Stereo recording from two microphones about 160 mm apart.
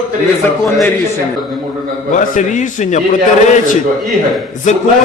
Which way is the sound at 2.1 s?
50° left (ahead or behind).